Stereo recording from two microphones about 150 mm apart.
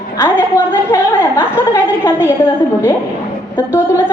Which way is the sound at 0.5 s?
15° left (ahead or behind).